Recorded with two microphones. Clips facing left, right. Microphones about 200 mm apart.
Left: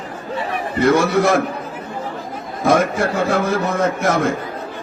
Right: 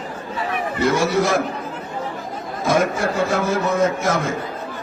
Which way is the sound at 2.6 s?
60° left (ahead or behind).